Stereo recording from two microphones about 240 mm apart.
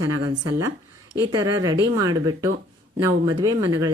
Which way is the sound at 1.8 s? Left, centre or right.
Centre.